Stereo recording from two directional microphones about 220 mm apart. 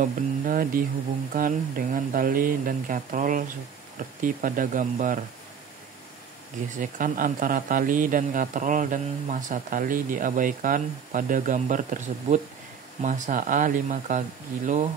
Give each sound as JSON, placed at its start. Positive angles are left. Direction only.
{"t": 0.0, "sound": "a man's voice", "side_deg": -40}
{"t": 6.8, "sound": "a man's voice", "side_deg": -35}